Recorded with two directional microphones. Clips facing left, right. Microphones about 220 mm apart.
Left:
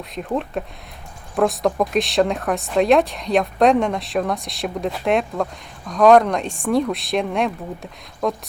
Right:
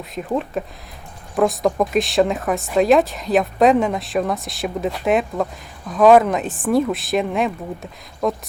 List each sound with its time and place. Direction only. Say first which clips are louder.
0.0 s speech: right 1 dB; centre (ahead or behind)